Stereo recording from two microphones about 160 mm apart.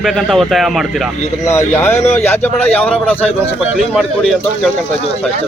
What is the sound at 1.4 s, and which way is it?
Speech, 15° left (ahead or behind).